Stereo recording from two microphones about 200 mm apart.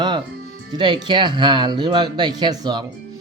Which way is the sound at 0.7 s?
20° right (ahead or behind).